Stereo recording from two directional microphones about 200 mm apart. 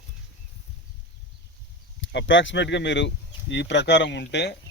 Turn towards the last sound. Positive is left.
turn(degrees=60)  # may be behind; listen again after turning